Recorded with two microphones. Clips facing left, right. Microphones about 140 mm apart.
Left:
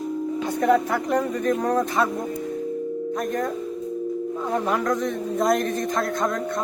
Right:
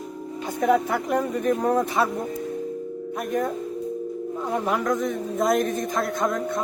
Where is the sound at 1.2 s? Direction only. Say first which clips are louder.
Even; 10° right (ahead or behind).